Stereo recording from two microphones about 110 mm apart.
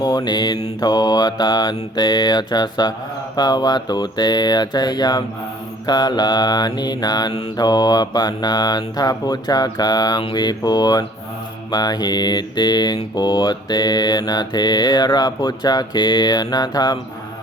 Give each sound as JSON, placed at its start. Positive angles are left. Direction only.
{"t": 0.0, "sound": "mantra", "side_deg": 40}